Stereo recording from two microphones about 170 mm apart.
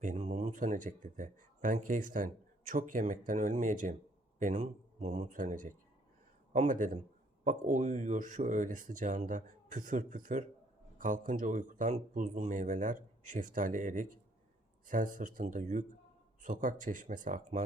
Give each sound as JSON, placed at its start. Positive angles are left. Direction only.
{"t": 0.0, "sound": "speech", "side_deg": -45}